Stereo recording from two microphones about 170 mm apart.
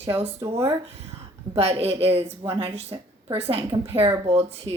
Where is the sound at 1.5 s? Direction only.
35° right (ahead or behind).